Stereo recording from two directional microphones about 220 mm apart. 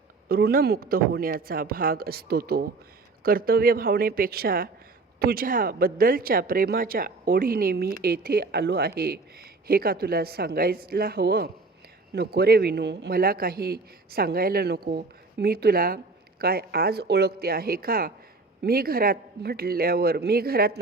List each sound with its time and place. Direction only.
0.3 s speech: 45° right (ahead or behind)